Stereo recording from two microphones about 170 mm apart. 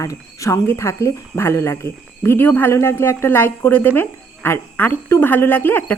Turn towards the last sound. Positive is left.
turn(degrees=10)  # may be behind; listen again after turning